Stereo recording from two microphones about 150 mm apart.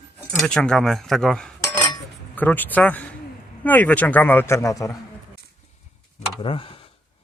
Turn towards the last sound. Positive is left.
turn(degrees=35)  # may be behind; listen again after turning